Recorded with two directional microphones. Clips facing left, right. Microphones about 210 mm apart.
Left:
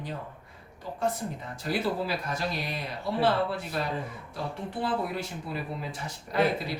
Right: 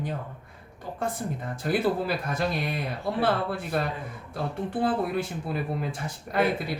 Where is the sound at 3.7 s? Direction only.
55° right (ahead or behind).